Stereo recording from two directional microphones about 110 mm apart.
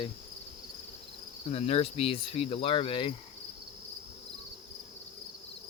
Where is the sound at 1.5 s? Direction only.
70° left (ahead or behind); by 3.1 s 50° left (ahead or behind).